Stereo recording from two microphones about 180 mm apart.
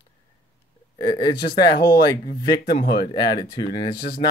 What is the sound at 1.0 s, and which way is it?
Speech, 25° left (ahead or behind).